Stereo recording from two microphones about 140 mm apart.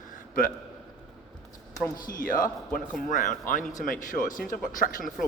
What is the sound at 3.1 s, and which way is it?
Speech, 65° left (ahead or behind).